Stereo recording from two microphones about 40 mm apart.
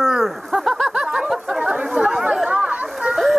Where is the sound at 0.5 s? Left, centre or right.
Centre.